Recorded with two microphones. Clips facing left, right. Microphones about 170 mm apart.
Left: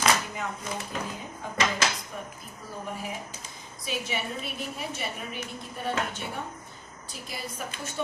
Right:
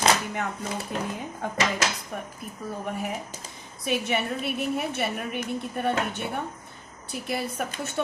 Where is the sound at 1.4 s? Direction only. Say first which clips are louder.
Right 1 dB; 60° right (ahead or behind).